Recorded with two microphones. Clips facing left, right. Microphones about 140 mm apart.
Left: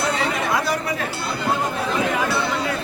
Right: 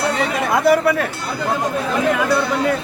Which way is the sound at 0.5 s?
60° right (ahead or behind).